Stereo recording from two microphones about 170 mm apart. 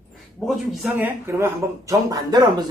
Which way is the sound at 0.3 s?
Centre (ahead or behind).